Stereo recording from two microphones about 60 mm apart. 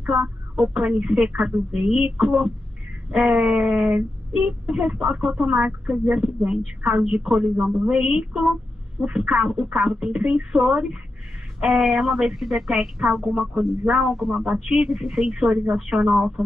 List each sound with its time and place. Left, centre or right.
0.0 s a woman's voice: right